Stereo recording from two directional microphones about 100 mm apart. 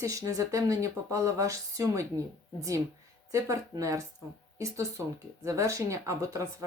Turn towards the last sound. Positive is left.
turn(degrees=-30)  # may be behind; listen again after turning